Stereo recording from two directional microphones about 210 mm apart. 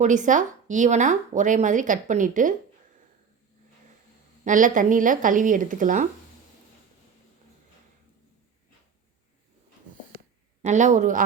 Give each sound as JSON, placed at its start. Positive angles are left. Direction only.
{"t": 0.0, "sound": "speech", "side_deg": -35}
{"t": 4.4, "sound": "speech", "side_deg": -40}
{"t": 10.6, "sound": "speech", "side_deg": -35}